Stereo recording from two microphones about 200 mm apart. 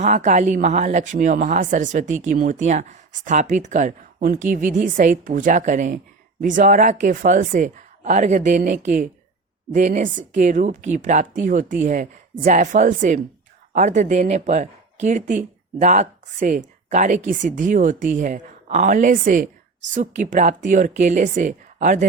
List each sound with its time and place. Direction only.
0.0 s speech: 35° right (ahead or behind)